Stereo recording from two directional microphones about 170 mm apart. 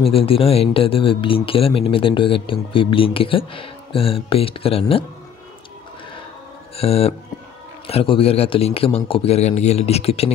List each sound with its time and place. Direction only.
0.0 s speech: 35° left (ahead or behind)
6.8 s speech: 35° left (ahead or behind)